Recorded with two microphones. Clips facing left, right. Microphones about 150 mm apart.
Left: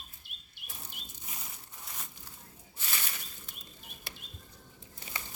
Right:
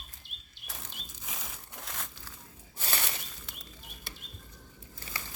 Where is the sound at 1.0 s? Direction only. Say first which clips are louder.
Right 3 dB; 90° right.